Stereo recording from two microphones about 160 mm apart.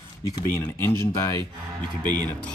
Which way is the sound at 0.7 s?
15° left (ahead or behind).